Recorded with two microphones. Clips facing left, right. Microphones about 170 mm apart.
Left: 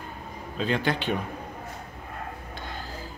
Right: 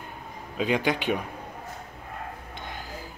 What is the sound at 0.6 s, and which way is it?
Speech, 10° right (ahead or behind).